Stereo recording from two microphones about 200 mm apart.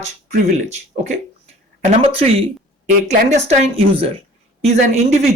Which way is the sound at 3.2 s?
35° right (ahead or behind).